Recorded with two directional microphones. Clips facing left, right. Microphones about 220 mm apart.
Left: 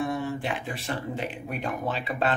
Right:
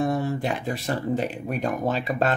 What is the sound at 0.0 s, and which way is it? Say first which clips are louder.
Speech: right 4 dB; 40° right (ahead or behind).